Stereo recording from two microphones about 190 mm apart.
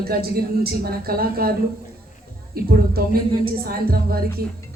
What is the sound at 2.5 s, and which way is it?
A woman's voice, 55° right (ahead or behind).